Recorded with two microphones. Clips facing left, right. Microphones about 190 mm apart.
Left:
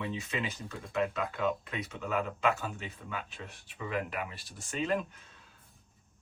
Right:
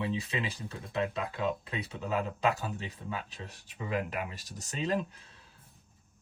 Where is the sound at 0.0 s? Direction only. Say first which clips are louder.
Right 2 dB; 30° right (ahead or behind).